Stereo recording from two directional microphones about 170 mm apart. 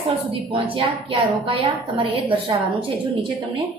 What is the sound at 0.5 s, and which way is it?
A woman's voice, 30° right (ahead or behind).